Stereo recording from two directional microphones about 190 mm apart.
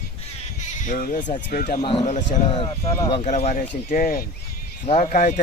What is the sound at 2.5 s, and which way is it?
Speech, 20° left (ahead or behind).